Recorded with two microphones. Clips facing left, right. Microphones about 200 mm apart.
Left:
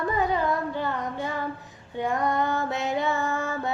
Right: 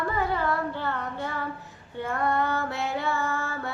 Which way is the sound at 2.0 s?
15° left (ahead or behind).